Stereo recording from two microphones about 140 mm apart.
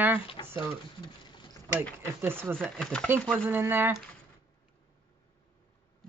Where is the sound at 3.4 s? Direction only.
15° right (ahead or behind).